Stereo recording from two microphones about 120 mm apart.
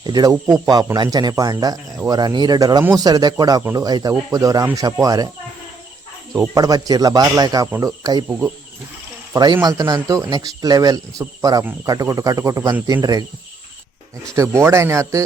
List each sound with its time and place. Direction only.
0.0 s speech: 35° right (ahead or behind)
6.3 s speech: 30° right (ahead or behind)
8.3 s speech: 15° right (ahead or behind)
9.3 s speech: 35° right (ahead or behind)
14.3 s speech: 25° right (ahead or behind)